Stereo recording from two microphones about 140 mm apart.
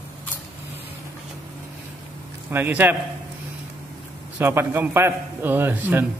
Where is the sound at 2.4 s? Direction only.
15° right (ahead or behind).